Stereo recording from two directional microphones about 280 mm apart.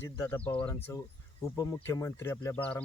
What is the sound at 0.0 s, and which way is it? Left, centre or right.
Speech, centre.